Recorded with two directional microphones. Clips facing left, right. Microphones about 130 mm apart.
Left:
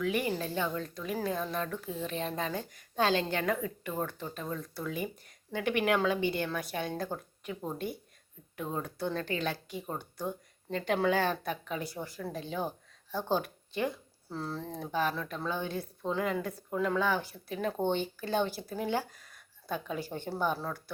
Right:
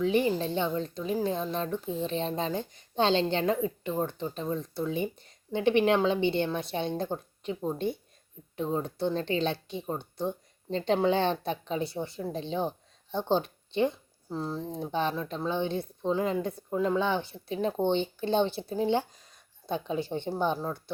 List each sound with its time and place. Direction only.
0.0 s speech: 25° right (ahead or behind)